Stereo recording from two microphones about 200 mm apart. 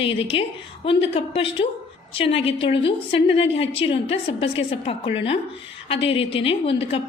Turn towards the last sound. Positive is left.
turn(degrees=30)  # may be behind; listen again after turning